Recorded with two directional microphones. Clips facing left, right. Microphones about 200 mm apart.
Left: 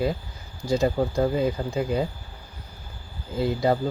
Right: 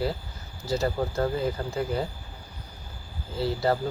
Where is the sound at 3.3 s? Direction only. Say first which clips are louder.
Left 3 dB; 15° left (ahead or behind).